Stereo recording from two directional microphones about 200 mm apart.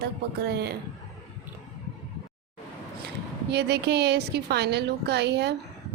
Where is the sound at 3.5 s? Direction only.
55° right (ahead or behind).